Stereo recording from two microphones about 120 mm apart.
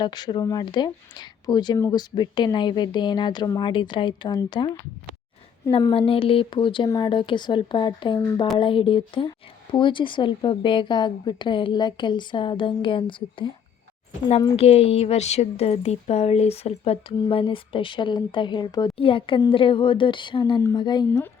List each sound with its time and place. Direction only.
0.0 s a woman's voice: 35° left (ahead or behind)
5.9 s speech: 50° left (ahead or behind)
6.8 s speech: 30° left (ahead or behind)
7.1 s a woman's voice: 40° left (ahead or behind)
14.5 s speech: 55° left (ahead or behind); by 18.9 s 35° left (ahead or behind)
18.9 s a woman's voice: 45° left (ahead or behind)